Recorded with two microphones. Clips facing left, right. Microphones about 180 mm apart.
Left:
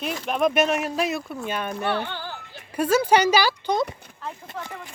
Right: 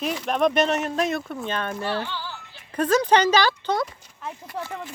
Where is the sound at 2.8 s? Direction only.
10° left (ahead or behind).